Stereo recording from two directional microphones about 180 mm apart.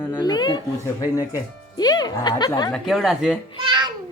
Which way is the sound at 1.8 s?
20° left (ahead or behind).